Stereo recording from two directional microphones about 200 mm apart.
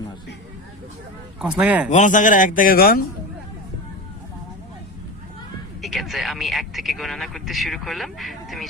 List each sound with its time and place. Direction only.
1.4 s a man's voice: 5° right (ahead or behind)
1.9 s speech: 40° left (ahead or behind)
5.8 s speech: centre (ahead or behind)